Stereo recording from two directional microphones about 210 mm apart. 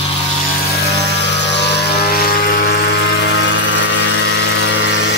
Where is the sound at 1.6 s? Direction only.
50° left (ahead or behind).